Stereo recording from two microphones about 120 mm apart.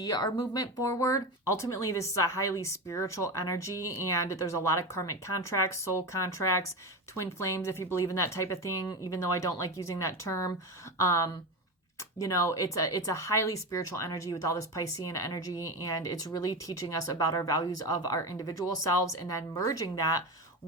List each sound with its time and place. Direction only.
0.0 s speech: 30° left (ahead or behind)